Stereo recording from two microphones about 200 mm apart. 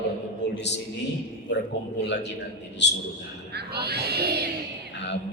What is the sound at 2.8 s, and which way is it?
Mantra, 60° left (ahead or behind).